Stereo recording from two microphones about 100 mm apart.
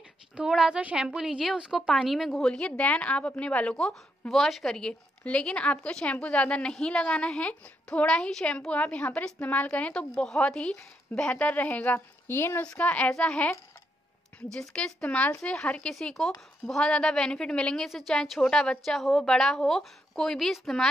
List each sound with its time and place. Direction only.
0.4 s a woman's voice: 5° right (ahead or behind)